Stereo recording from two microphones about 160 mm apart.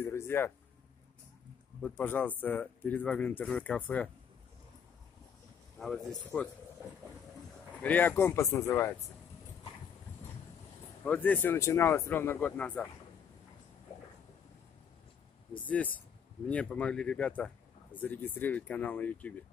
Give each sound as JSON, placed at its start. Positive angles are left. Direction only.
{"t": 0.0, "sound": "a sound", "side_deg": 15}
{"t": 1.8, "sound": "speech", "side_deg": 10}
{"t": 5.8, "sound": "speech", "side_deg": 0}
{"t": 7.8, "sound": "speech", "side_deg": 10}
{"t": 11.1, "sound": "speech", "side_deg": 10}
{"t": 16.4, "sound": "speech", "side_deg": 10}